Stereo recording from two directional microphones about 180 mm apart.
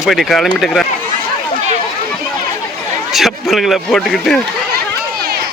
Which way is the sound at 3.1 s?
Centre (ahead or behind).